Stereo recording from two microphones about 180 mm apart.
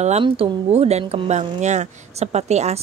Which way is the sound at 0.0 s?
35° right (ahead or behind).